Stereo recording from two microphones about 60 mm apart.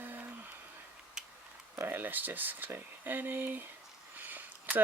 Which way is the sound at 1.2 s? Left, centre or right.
Centre.